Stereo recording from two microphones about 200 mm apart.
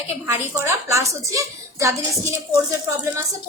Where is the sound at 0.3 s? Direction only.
15° right (ahead or behind).